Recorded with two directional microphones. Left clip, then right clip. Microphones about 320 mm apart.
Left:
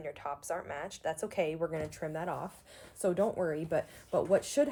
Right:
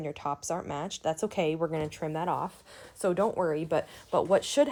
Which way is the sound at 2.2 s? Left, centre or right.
Right.